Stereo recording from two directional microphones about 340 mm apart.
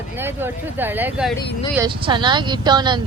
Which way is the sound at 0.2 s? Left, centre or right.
Centre.